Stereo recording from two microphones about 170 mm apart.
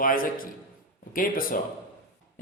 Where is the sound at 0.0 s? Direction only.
55° left (ahead or behind).